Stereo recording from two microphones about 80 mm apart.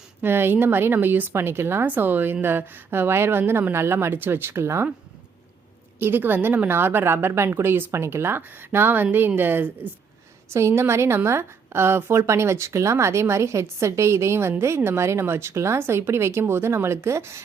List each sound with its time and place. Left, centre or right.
0.2 s a woman's voice: right
6.0 s a woman's voice: right